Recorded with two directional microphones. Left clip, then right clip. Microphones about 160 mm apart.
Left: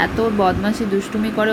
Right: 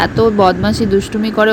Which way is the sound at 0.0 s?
35° right (ahead or behind).